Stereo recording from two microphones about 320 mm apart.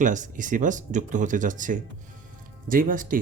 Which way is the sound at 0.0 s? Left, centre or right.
Right.